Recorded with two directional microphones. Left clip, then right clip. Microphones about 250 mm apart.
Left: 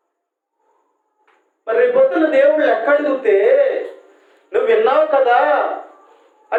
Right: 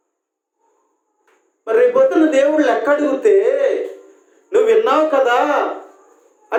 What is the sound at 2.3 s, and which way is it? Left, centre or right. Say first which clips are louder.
Speech: left 1 dB; right.